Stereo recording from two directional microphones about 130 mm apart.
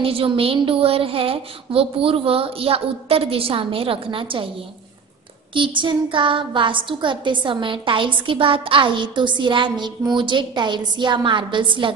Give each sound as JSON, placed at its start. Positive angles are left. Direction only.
{"t": 0.0, "sound": "a woman's voice", "side_deg": -45}
{"t": 5.5, "sound": "a woman's voice", "side_deg": -40}